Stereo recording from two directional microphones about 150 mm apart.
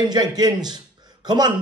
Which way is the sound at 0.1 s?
25° right (ahead or behind).